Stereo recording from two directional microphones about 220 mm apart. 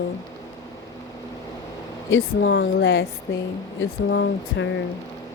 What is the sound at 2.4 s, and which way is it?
Speech, 50° left (ahead or behind).